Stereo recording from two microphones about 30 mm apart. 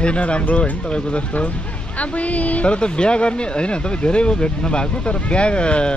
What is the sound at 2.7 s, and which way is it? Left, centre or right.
Speech, left.